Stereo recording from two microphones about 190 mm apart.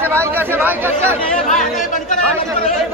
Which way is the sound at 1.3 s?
5° left (ahead or behind).